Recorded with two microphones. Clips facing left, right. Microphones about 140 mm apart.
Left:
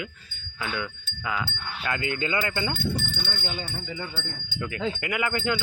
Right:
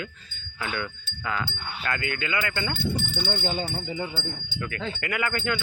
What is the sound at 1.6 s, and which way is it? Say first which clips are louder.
Wind chime: even; 5° right (ahead or behind).